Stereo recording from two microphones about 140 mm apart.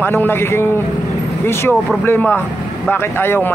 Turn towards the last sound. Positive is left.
turn(degrees=15)  # may be behind; listen again after turning